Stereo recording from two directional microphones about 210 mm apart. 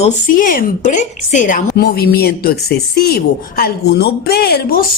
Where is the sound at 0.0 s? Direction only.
40° left (ahead or behind).